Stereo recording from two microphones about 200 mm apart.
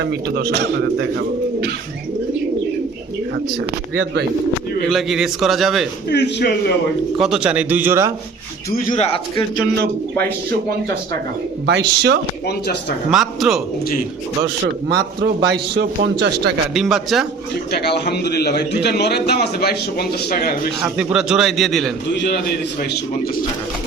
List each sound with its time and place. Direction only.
0.0 s a man's voice: 55° right (ahead or behind)
3.9 s a man's voice: 55° right (ahead or behind)
4.9 s a man's voice: centre (ahead or behind)
6.1 s a man's voice: 55° left (ahead or behind)
7.2 s a man's voice: 5° right (ahead or behind)
8.7 s a man's voice: 45° left (ahead or behind)
11.6 s a man's voice: 60° right (ahead or behind)
13.1 s a man's voice: centre (ahead or behind)
14.8 s a man's voice: 55° right (ahead or behind)
16.7 s a man's voice: centre (ahead or behind)
17.7 s a man's voice: 55° left (ahead or behind)
20.8 s a man's voice: 5° right (ahead or behind)
22.8 s a man's voice: 45° left (ahead or behind)